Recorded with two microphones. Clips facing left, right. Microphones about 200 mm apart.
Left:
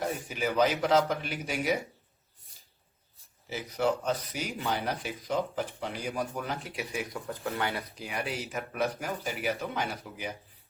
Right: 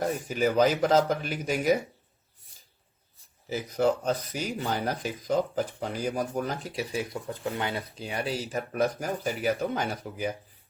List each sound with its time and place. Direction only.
0.1 s speech: 40° right (ahead or behind)
3.5 s speech: 40° right (ahead or behind)